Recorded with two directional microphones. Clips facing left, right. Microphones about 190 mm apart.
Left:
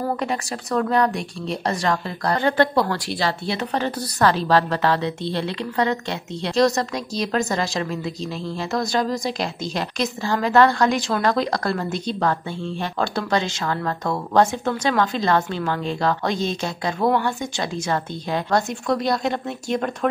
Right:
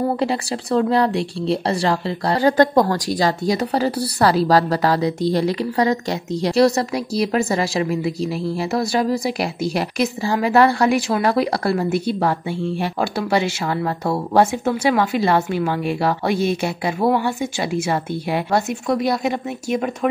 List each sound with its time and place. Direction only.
0.2 s speech: 30° right (ahead or behind)
5.3 s speech: 15° right (ahead or behind)